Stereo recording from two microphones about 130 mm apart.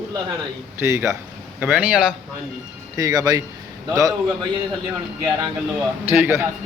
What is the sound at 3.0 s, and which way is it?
Speech, 30° right (ahead or behind).